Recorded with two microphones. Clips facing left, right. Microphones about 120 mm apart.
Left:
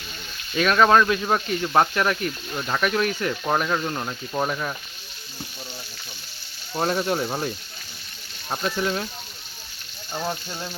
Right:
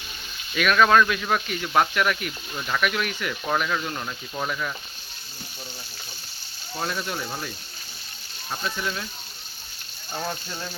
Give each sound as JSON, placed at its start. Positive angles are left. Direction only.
{"t": 0.5, "sound": "speech", "side_deg": 30}
{"t": 6.7, "sound": "speech", "side_deg": 40}
{"t": 10.2, "sound": "speech", "side_deg": 20}